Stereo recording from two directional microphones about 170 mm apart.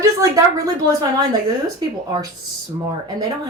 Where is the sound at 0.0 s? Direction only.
20° right (ahead or behind).